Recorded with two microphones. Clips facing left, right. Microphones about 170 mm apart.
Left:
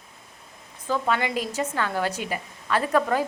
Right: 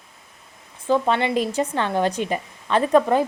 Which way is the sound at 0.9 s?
25° right (ahead or behind).